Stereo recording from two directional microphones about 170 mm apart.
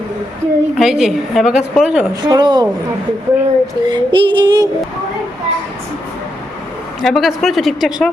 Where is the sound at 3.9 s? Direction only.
25° right (ahead or behind).